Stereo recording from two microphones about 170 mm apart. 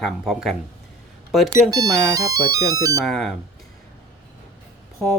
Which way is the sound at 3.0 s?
5° left (ahead or behind).